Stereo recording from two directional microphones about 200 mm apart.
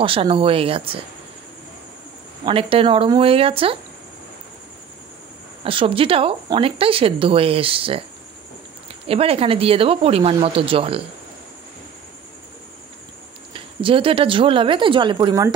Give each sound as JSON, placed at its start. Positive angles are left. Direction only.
{"t": 0.0, "sound": "speech", "side_deg": -25}
{"t": 2.4, "sound": "speech", "side_deg": -25}
{"t": 5.6, "sound": "speech", "side_deg": -25}
{"t": 9.0, "sound": "speech", "side_deg": -30}
{"t": 13.5, "sound": "speech", "side_deg": -25}